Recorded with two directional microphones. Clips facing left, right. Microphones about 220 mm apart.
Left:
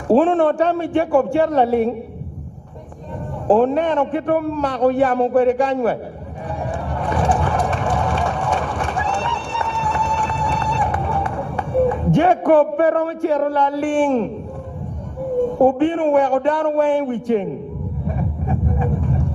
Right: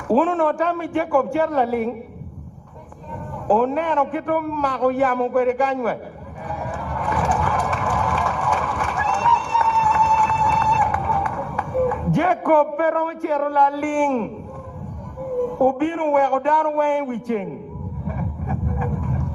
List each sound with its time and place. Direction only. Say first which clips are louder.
0.1 s a man's voice: left 4 dB; 30° left (ahead or behind)
3.4 s a man's voice: left 4 dB; 30° left (ahead or behind)
6.6 s a sound: left 4 dB; 30° left (ahead or behind)
15.2 s a man's voice: left 3 dB; 30° left (ahead or behind)
18.0 s vehicle: left 3 dB; 30° left (ahead or behind)